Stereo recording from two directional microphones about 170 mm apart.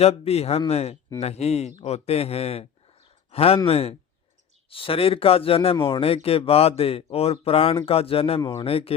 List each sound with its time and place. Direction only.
0.0 s speech: 35° left (ahead or behind)